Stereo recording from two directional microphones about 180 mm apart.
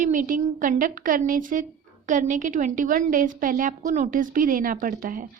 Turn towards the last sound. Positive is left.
turn(degrees=-50)  # may be behind; listen again after turning